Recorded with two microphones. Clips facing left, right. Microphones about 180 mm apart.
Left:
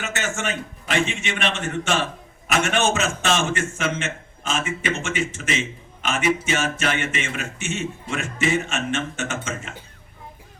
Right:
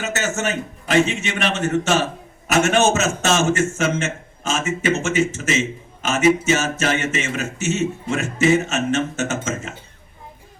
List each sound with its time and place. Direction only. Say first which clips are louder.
0.0 s a man's voice: right 4 dB; 40° right (ahead or behind)